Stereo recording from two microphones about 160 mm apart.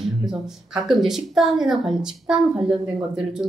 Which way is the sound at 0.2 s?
Centre (ahead or behind).